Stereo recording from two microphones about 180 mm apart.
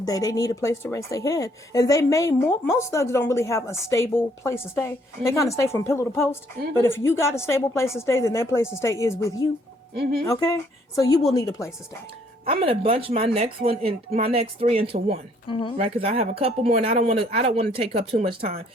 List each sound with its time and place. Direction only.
0.0 s a woman's voice: 20° left (ahead or behind)
10.0 s speech: 60° right (ahead or behind)
10.2 s speech: 20° left (ahead or behind)
12.5 s speech: 30° right (ahead or behind)
15.4 s speech: 30° left (ahead or behind)
15.8 s speech: 35° right (ahead or behind)